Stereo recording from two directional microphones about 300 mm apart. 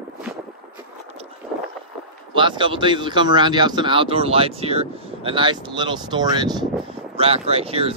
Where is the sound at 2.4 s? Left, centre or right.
Centre.